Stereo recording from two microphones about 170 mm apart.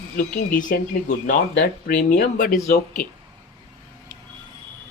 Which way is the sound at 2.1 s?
55° left (ahead or behind).